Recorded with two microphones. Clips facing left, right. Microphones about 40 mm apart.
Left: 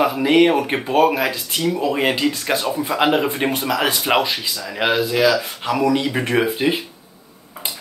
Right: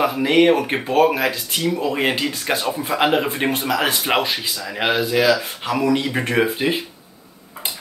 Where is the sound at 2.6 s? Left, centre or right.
Right.